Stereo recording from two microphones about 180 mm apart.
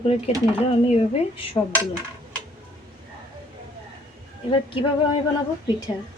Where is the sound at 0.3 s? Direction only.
35° left (ahead or behind).